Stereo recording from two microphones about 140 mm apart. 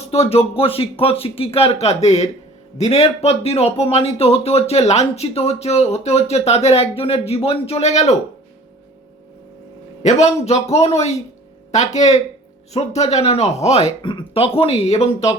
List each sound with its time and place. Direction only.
0.1 s speech: 45° left (ahead or behind)
10.0 s speech: 55° left (ahead or behind)
14.0 s speech: 35° left (ahead or behind)